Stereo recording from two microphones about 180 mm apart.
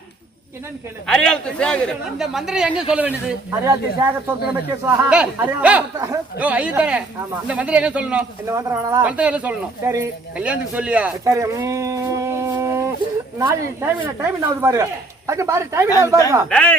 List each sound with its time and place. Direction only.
1.0 s a man's voice: 5° left (ahead or behind)
8.4 s speech: 15° right (ahead or behind)
11.3 s a sound: 20° right (ahead or behind)
13.4 s speech: 15° right (ahead or behind)
16.5 s a man's voice: 5° left (ahead or behind)